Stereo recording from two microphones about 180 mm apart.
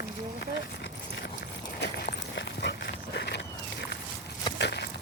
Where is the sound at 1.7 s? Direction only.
75° left (ahead or behind).